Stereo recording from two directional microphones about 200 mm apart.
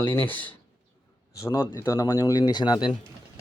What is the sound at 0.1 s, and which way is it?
Speech, 10° left (ahead or behind).